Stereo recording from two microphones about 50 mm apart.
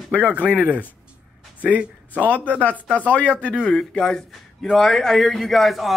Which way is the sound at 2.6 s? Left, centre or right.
Left.